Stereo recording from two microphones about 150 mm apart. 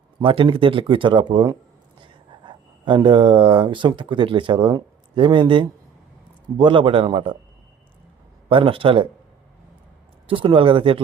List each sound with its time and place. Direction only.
0.2 s a man's voice: 35° right (ahead or behind)
8.4 s a man's voice: 35° right (ahead or behind)
10.2 s a man's voice: 35° right (ahead or behind)